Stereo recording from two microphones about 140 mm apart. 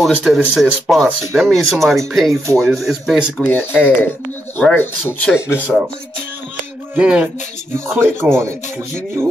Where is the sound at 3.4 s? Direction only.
10° left (ahead or behind).